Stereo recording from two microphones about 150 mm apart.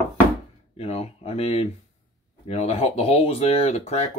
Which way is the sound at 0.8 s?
40° left (ahead or behind).